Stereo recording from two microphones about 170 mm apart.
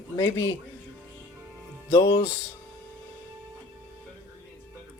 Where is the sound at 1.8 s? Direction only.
30° left (ahead or behind).